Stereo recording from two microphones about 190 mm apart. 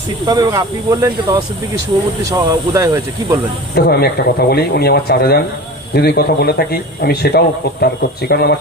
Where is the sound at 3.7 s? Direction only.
55° left (ahead or behind).